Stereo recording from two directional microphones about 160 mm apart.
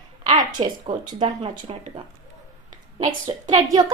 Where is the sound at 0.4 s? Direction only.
30° right (ahead or behind).